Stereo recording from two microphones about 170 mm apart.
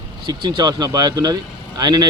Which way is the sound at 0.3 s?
25° right (ahead or behind).